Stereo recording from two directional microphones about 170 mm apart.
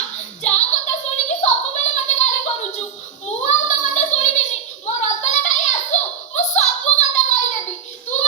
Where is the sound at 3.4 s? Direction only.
45° left (ahead or behind).